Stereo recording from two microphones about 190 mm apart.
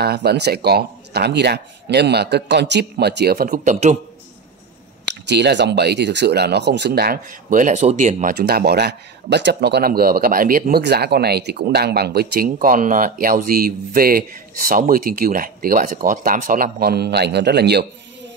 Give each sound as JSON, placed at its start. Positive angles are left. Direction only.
{"t": 0.0, "sound": "speech", "side_deg": -55}
{"t": 5.0, "sound": "speech", "side_deg": -65}